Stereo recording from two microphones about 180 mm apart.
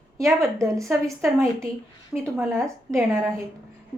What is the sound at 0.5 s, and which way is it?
A woman's voice, 15° right (ahead or behind).